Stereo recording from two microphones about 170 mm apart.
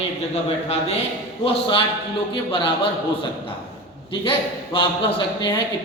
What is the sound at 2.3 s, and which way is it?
Speech, 30° left (ahead or behind).